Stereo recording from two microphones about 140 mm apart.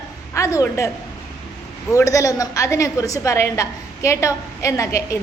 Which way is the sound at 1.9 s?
25° left (ahead or behind).